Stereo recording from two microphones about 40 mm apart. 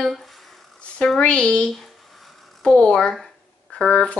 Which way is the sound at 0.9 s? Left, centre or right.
Left.